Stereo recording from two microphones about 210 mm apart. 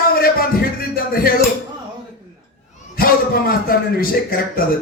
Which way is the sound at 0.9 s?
45° left (ahead or behind).